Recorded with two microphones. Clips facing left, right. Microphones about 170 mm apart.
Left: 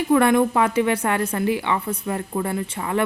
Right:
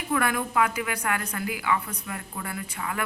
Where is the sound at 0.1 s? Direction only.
30° left (ahead or behind).